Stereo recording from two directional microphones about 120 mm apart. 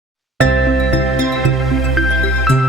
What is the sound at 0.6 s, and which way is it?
Music, centre (ahead or behind).